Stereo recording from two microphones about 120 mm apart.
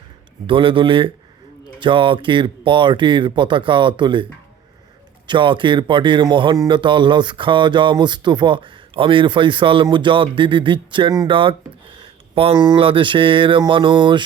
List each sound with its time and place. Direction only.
0.4 s speech: 45° right (ahead or behind)
5.3 s speech: 45° right (ahead or behind)
11.3 s a sound: 45° right (ahead or behind)
12.5 s speech: 35° right (ahead or behind)